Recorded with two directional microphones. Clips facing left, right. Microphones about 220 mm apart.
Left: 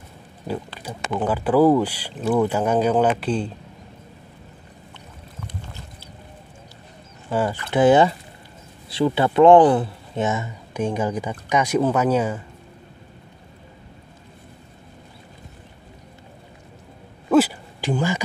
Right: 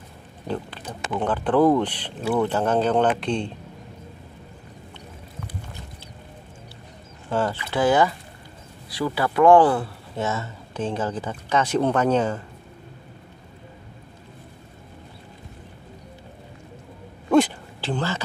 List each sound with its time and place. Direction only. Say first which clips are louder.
0.7 s speech: left 2 dB; 10° left (ahead or behind)
7.2 s speech: left 1 dB; 10° left (ahead or behind)
7.7 s speech: left 5 dB; 20° left (ahead or behind)
17.3 s a sound: left 1 dB; 10° left (ahead or behind)